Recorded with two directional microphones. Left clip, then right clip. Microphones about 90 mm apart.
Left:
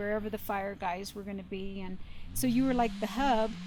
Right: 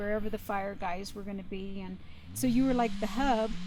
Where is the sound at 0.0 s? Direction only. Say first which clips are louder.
Even; 20° left (ahead or behind).